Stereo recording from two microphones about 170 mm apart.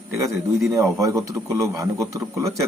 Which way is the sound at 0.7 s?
20° right (ahead or behind).